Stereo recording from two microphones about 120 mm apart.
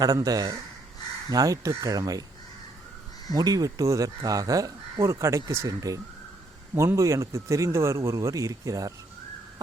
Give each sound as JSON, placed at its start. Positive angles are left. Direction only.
{"t": 0.0, "sound": "speech", "side_deg": -30}
{"t": 3.3, "sound": "speech", "side_deg": -30}